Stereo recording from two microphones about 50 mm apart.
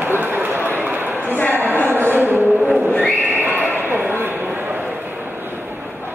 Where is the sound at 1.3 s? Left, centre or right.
Left.